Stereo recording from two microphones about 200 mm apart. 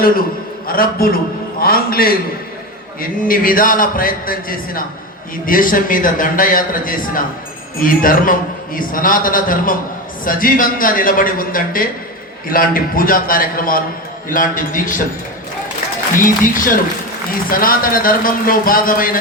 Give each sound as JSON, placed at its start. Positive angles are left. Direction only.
{"t": 0.7, "sound": "a man's voice", "side_deg": 45}
{"t": 16.1, "sound": "a man's voice", "side_deg": 40}